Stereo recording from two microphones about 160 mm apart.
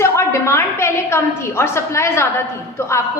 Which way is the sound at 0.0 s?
15° left (ahead or behind).